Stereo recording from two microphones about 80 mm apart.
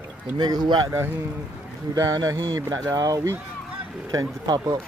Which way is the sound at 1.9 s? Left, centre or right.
Right.